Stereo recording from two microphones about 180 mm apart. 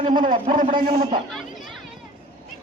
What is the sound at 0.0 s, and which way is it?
Speech, 25° right (ahead or behind).